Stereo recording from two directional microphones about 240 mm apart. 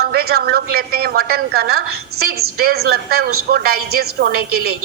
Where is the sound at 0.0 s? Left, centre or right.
Right.